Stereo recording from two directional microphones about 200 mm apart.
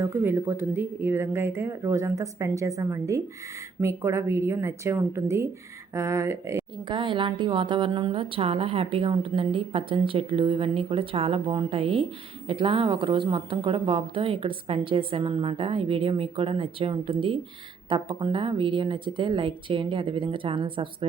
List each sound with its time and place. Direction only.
0.0 s a woman's voice: 10° right (ahead or behind)